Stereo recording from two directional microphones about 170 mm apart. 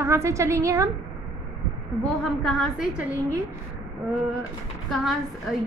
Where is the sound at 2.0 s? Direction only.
Centre (ahead or behind).